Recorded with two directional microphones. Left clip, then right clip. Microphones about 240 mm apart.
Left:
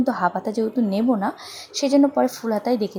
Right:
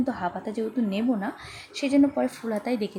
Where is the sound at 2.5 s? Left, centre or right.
Centre.